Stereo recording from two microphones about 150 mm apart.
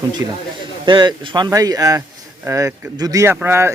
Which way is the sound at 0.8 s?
30° right (ahead or behind).